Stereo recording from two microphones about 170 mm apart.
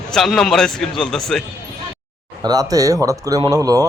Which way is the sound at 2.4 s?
20° right (ahead or behind).